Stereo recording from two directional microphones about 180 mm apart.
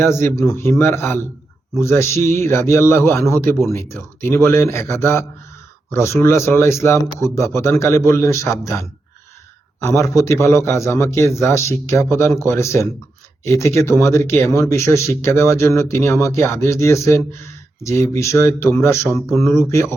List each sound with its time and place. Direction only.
0.0 s speech: 15° left (ahead or behind)